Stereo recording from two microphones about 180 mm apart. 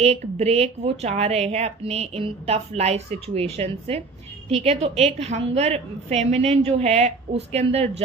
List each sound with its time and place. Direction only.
0.0 s a woman's voice: 35° right (ahead or behind)